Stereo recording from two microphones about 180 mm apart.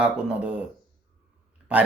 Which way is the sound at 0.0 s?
5° right (ahead or behind).